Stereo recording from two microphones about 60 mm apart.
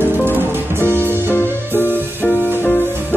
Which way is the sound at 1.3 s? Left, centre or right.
Left.